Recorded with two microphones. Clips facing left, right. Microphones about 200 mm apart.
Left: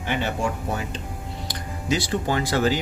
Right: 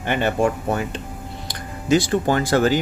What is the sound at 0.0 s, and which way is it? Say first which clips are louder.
Speech: right 5 dB; 55° right (ahead or behind).